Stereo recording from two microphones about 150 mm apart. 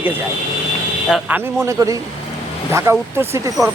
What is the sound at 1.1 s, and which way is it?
Speech, 10° right (ahead or behind).